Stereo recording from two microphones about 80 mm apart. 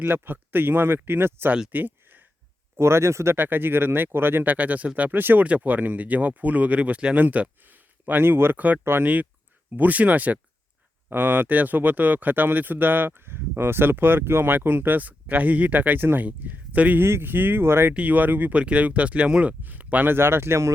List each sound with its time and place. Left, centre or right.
0.0 s speech: right
1.7 s a sound: right
2.7 s speech: right; by 17.0 s centre
17.0 s speech: right